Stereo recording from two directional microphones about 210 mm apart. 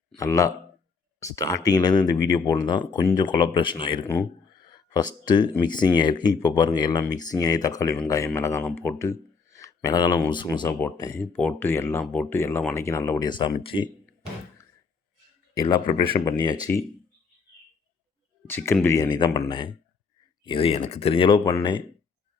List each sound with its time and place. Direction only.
0.2 s speech: 15° left (ahead or behind)
4.0 s speech: 10° left (ahead or behind)
15.6 s speech: 25° left (ahead or behind)
18.4 s speech: 10° left (ahead or behind)